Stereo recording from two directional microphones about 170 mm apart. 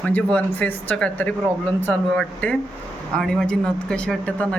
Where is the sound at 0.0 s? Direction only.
5° left (ahead or behind).